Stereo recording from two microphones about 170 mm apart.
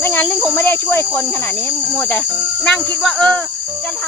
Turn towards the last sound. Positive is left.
turn(degrees=5)  # may be behind; listen again after turning